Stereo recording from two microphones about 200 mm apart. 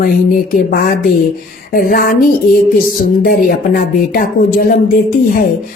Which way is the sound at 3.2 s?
45° left (ahead or behind).